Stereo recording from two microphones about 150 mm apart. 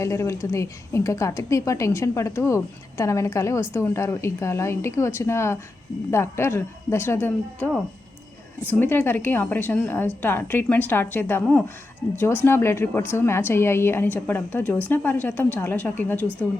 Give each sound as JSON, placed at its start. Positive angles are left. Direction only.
{"t": 0.0, "sound": "a woman's voice", "side_deg": 20}
{"t": 12.5, "sound": "a woman's voice", "side_deg": 15}